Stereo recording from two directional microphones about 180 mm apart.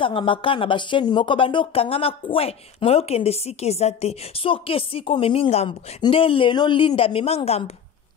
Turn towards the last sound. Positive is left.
turn(degrees=35)  # may be behind; listen again after turning